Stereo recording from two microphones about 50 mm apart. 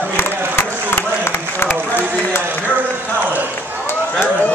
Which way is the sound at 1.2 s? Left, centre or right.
Left.